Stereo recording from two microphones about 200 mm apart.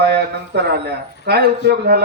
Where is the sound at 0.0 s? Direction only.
55° right (ahead or behind).